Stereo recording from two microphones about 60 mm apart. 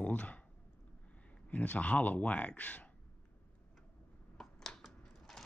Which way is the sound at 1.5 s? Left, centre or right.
Left.